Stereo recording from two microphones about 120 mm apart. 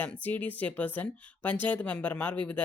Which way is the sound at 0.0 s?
15° left (ahead or behind).